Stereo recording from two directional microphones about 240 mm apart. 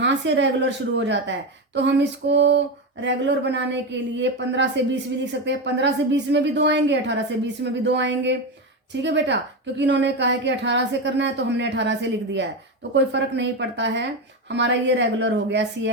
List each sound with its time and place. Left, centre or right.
0.0 s speech: right